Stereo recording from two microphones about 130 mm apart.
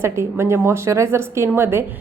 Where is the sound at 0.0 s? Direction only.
20° right (ahead or behind).